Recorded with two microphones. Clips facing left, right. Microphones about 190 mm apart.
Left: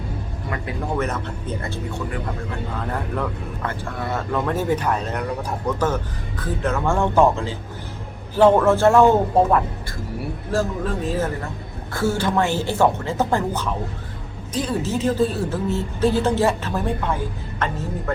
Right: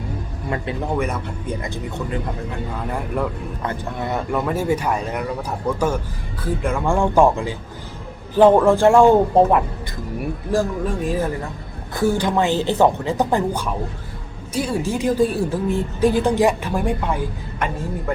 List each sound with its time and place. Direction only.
0.9 s speech: 10° right (ahead or behind)